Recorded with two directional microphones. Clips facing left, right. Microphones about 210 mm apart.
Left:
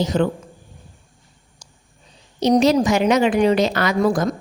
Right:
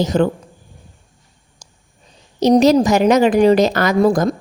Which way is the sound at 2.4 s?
40° right (ahead or behind).